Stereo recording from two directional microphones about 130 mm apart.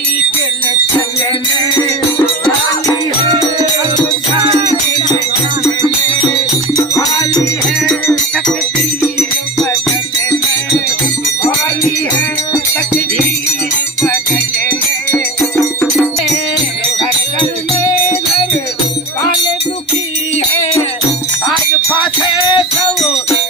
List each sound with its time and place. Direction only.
21.9 s music: 35° left (ahead or behind)
23.0 s music: centre (ahead or behind)